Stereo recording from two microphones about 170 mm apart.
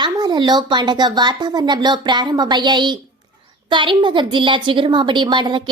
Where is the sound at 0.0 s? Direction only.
25° right (ahead or behind).